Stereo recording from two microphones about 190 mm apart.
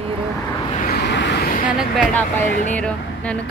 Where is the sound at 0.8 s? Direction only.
55° left (ahead or behind).